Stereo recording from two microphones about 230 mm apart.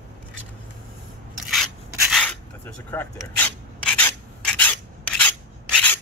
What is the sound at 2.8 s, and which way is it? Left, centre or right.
Rub, centre.